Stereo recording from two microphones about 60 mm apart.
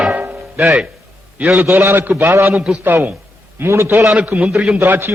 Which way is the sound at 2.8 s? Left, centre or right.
Right.